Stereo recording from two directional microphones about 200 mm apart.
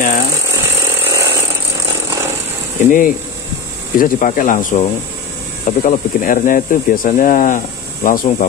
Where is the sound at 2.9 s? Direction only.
40° left (ahead or behind).